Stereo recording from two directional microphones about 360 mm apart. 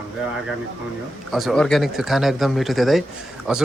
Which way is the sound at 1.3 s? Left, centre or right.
Centre.